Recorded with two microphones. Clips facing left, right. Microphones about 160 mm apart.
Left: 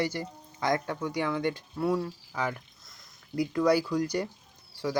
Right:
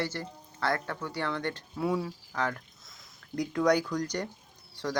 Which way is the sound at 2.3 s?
10° left (ahead or behind).